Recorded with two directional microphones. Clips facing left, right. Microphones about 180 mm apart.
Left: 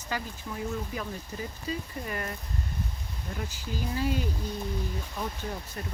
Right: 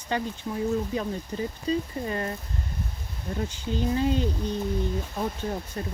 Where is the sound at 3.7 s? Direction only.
25° right (ahead or behind).